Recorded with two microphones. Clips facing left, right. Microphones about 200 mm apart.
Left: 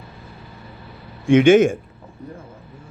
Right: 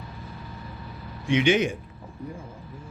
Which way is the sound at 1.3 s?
50° left (ahead or behind).